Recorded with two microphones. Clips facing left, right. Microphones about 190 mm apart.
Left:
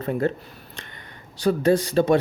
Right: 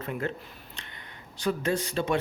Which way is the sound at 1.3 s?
35° left (ahead or behind).